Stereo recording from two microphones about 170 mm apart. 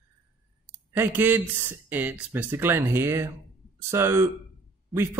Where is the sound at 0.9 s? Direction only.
10° right (ahead or behind).